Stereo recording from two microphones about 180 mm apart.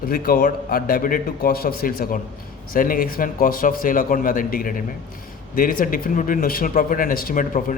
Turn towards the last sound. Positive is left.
turn(degrees=50)  # may be behind; listen again after turning